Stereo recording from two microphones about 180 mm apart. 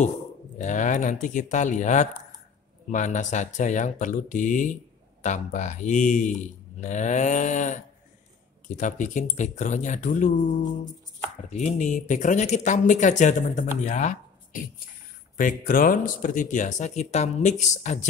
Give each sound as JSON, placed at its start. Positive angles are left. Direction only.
{"t": 0.6, "sound": "speech", "side_deg": 45}
{"t": 11.5, "sound": "speech", "side_deg": 40}